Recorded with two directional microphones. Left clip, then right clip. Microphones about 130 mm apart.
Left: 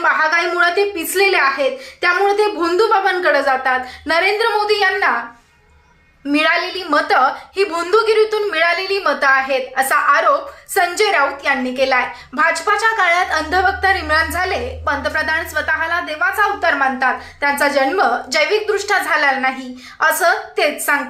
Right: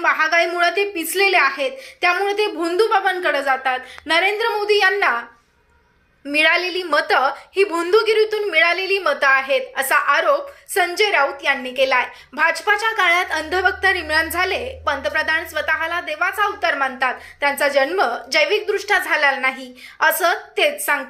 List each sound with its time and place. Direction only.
0.0 s a sound: 15° right (ahead or behind)
0.5 s a woman's voice: 15° right (ahead or behind)
6.3 s a woman's voice: 20° right (ahead or behind)